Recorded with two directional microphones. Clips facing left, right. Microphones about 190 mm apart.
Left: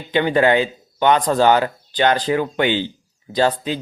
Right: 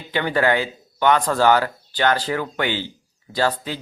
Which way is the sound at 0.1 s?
20° left (ahead or behind).